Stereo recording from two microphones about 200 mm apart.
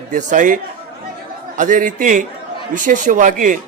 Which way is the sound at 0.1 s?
40° right (ahead or behind).